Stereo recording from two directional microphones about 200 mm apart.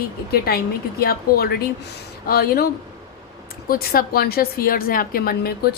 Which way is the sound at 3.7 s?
50° left (ahead or behind).